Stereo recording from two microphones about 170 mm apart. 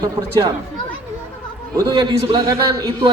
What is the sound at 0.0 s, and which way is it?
Speech, 20° right (ahead or behind).